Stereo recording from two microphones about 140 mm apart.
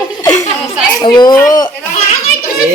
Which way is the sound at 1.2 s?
25° left (ahead or behind).